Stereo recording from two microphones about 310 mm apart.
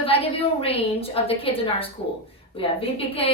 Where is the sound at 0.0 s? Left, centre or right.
Centre.